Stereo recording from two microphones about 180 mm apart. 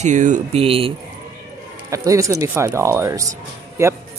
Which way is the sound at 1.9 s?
15° right (ahead or behind).